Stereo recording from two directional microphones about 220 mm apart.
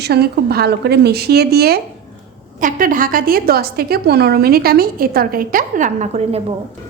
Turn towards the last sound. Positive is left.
turn(degrees=-30)  # may be behind; listen again after turning